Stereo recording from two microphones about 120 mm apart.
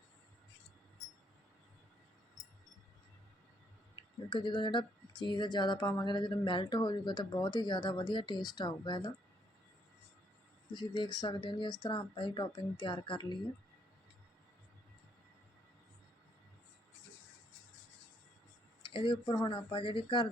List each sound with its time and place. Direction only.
4.3 s speech: 45° left (ahead or behind)
10.7 s speech: 40° left (ahead or behind)
18.8 s speech: 45° left (ahead or behind)
19.5 s speech: 45° left (ahead or behind)